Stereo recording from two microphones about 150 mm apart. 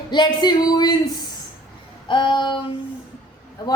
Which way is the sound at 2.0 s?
30° left (ahead or behind).